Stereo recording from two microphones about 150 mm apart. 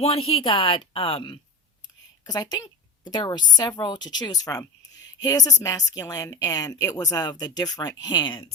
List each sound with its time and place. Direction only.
0.0 s a woman's voice: 40° left (ahead or behind)